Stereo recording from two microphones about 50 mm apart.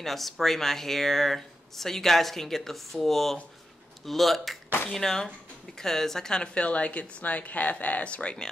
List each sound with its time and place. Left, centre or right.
0.0 s a woman's voice: centre; by 8.4 s left